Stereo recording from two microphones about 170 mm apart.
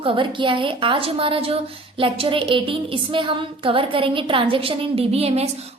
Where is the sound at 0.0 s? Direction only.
30° right (ahead or behind).